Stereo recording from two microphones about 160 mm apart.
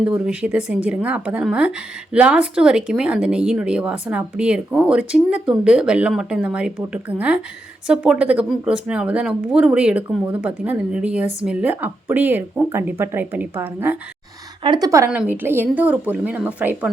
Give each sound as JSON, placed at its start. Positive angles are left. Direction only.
{"t": 0.0, "sound": "speech", "side_deg": -5}
{"t": 14.6, "sound": "speech", "side_deg": -25}
{"t": 15.1, "sound": "speech", "side_deg": -10}